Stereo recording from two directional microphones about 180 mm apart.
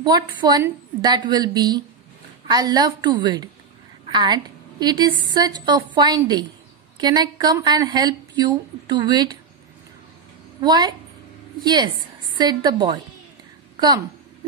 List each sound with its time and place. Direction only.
0.4 s a woman's voice: 25° right (ahead or behind)
10.6 s a woman's voice: 25° right (ahead or behind)